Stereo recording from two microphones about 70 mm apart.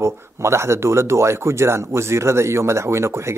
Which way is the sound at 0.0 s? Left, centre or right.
Right.